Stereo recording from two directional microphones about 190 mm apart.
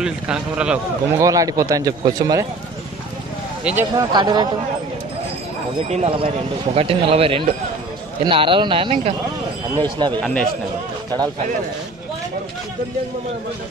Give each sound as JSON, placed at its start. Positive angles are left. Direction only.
{"t": 0.0, "sound": "a man's voice", "side_deg": -5}
{"t": 1.2, "sound": "speech", "side_deg": -20}
{"t": 3.9, "sound": "speech", "side_deg": -20}
{"t": 5.9, "sound": "speech", "side_deg": -30}
{"t": 10.2, "sound": "a man's voice", "side_deg": 5}